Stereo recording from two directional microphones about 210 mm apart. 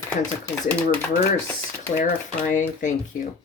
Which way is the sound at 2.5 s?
35° left (ahead or behind).